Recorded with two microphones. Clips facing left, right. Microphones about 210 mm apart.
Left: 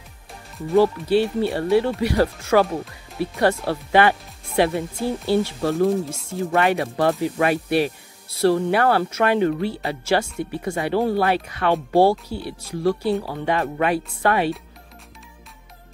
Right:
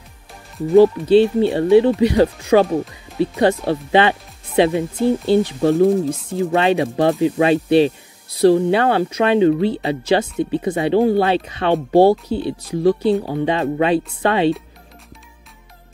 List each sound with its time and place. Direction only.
1.0 s speech: 20° right (ahead or behind)